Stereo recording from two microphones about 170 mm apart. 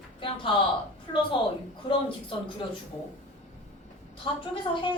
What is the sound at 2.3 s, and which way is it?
Speech, 30° left (ahead or behind).